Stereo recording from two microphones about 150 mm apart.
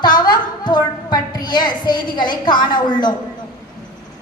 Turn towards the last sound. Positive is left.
turn(degrees=30)  # may be behind; listen again after turning